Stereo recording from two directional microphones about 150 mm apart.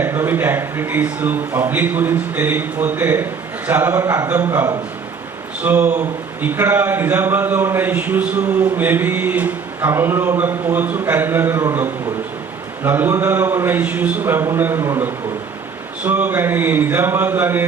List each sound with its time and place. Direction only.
0.0 s a man's voice: 15° right (ahead or behind)